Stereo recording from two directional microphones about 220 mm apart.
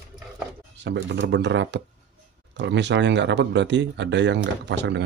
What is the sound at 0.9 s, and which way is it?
Speech, 50° right (ahead or behind).